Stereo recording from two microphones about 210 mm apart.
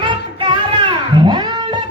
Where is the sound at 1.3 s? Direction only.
20° right (ahead or behind).